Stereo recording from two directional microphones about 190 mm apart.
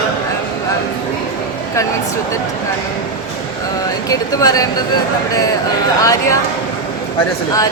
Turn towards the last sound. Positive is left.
turn(degrees=15)  # may be behind; listen again after turning